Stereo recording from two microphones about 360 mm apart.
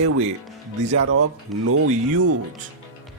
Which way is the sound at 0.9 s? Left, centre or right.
Right.